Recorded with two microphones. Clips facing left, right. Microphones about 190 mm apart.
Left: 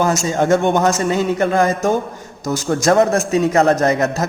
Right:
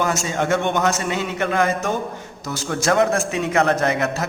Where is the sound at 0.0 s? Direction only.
40° left (ahead or behind).